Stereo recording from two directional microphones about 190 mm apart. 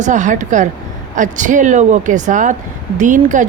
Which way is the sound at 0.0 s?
40° right (ahead or behind).